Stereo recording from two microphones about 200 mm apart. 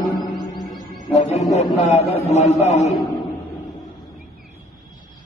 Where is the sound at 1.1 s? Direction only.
35° left (ahead or behind).